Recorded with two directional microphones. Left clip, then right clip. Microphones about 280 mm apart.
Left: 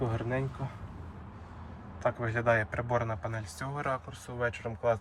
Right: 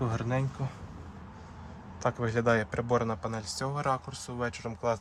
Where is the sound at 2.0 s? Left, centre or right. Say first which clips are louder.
Right 1 dB; right.